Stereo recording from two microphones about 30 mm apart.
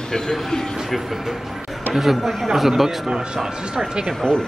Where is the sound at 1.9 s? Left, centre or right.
Centre.